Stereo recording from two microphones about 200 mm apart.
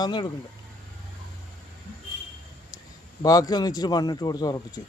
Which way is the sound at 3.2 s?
20° left (ahead or behind).